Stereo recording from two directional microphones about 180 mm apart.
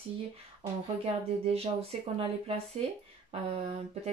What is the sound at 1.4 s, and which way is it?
Speech, 35° right (ahead or behind).